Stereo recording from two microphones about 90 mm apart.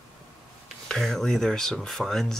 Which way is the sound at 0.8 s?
5° left (ahead or behind).